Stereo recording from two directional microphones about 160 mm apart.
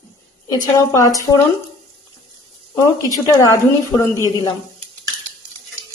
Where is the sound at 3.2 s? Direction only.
20° left (ahead or behind).